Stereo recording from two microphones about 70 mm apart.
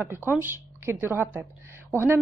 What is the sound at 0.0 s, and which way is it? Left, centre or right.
A woman's voice, right.